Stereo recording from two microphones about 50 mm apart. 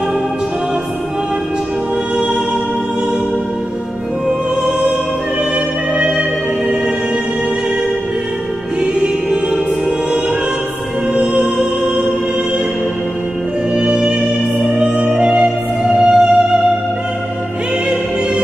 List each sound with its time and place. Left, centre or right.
5.9 s music: centre
9.0 s music: centre
13.7 s music: centre